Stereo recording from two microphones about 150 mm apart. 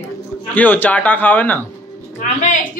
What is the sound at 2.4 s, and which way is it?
Speech, 55° left (ahead or behind).